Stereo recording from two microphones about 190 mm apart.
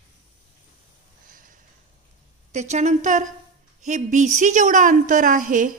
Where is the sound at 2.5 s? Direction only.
35° right (ahead or behind).